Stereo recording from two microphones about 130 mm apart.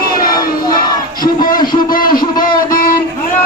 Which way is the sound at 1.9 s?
90° left.